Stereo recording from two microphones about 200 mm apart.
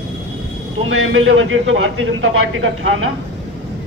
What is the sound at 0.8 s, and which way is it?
A man's voice, 75° right (ahead or behind).